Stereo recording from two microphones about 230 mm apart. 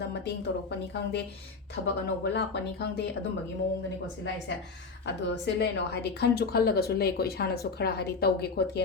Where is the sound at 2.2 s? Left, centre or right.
Left.